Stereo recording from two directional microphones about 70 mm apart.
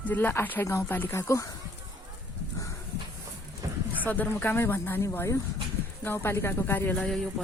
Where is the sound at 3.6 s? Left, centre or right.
Right.